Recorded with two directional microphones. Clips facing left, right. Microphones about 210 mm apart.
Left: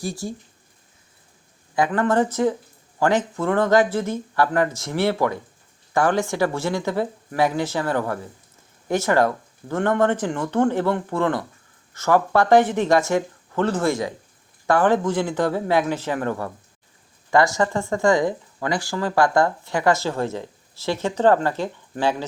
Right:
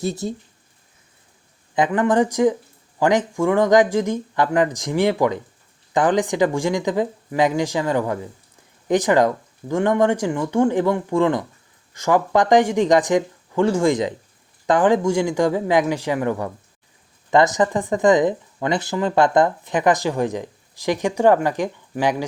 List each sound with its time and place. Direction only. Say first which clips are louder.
0.0 s speech: right 4 dB; 20° right (ahead or behind)
1.7 s speech: right 2 dB; 20° right (ahead or behind)